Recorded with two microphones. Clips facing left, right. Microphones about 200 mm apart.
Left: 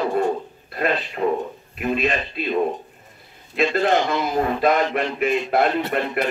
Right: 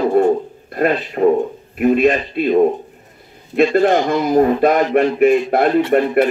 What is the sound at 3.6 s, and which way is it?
Speech, 50° right (ahead or behind).